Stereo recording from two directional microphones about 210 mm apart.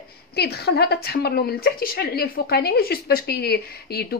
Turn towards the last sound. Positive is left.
turn(degrees=50)  # may be behind; listen again after turning